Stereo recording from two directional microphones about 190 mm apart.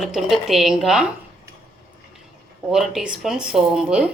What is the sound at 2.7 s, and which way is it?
Speech, 5° right (ahead or behind).